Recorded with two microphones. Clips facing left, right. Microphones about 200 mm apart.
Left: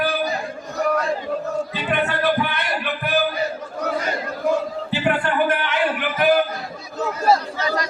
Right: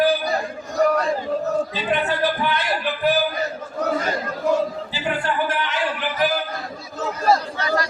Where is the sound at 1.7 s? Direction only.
60° left (ahead or behind).